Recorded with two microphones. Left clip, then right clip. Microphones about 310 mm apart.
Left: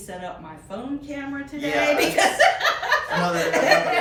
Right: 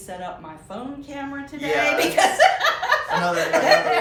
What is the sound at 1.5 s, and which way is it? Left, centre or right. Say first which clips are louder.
Speech: right 1 dB; centre.